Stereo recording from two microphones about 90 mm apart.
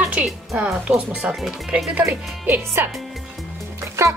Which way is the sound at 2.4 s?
25° right (ahead or behind).